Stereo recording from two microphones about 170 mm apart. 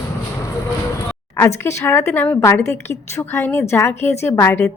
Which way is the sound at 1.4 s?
15° left (ahead or behind).